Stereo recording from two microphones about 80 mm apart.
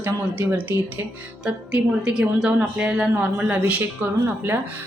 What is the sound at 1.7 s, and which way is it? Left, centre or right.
A man's voice, centre.